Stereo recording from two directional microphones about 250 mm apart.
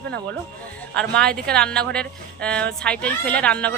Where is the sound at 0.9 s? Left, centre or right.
Centre.